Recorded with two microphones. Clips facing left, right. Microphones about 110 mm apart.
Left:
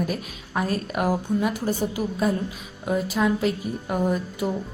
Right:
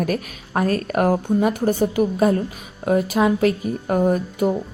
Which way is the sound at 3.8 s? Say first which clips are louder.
Right 6 dB; 50° right (ahead or behind).